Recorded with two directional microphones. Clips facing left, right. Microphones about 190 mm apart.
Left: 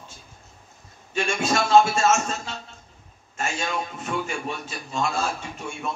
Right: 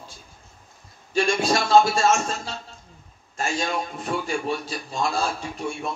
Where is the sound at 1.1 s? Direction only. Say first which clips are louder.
Right 3 dB; 35° right (ahead or behind).